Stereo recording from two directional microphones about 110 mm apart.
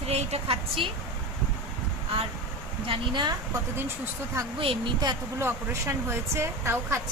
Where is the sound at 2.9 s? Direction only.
45° right (ahead or behind).